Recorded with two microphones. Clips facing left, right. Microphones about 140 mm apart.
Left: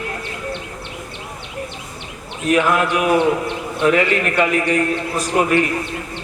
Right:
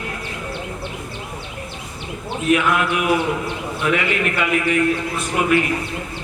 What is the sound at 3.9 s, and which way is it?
A man's voice, 40° left (ahead or behind).